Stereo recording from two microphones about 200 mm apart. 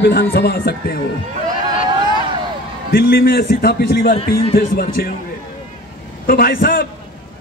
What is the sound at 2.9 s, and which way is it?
Speech, 50° left (ahead or behind).